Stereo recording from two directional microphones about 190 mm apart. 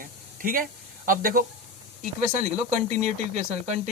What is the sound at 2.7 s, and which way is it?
Speech, 35° right (ahead or behind).